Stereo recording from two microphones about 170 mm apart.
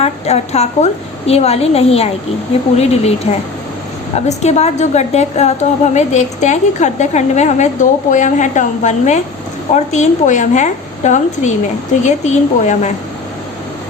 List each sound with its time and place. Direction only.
0.0 s a woman's voice: 40° left (ahead or behind)
4.3 s a woman's voice: 40° left (ahead or behind)